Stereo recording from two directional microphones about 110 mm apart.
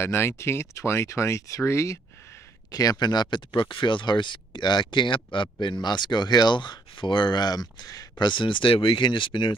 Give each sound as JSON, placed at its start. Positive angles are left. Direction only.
{"t": 0.0, "sound": "speech", "side_deg": 25}
{"t": 8.3, "sound": "speech", "side_deg": 50}